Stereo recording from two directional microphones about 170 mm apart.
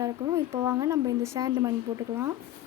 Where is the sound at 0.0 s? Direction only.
15° right (ahead or behind).